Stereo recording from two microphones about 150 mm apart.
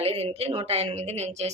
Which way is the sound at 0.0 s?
40° right (ahead or behind).